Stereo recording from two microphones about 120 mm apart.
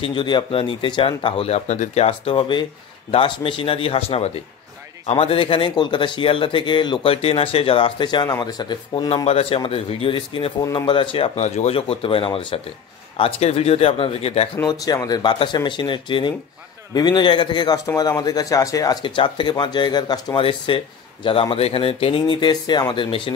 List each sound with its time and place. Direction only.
0.0 s speech: 45° left (ahead or behind)
1.7 s speech: 80° left
2.0 s speech: 50° left (ahead or behind)
10.6 s speech: 30° left (ahead or behind)
10.9 s speech: 45° left (ahead or behind)
11.3 s speech: 65° left (ahead or behind); by 12.5 s 45° left (ahead or behind)
13.2 s speech: 55° left (ahead or behind)
14.6 s speech: 35° left (ahead or behind)
19.0 s speech: 45° left (ahead or behind)